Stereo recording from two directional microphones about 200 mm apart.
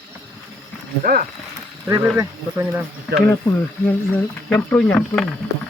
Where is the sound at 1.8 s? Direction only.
10° right (ahead or behind).